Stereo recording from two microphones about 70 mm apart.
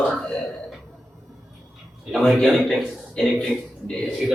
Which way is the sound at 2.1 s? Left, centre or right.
Centre.